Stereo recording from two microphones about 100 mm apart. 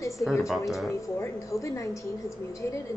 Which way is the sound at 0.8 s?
30° left (ahead or behind).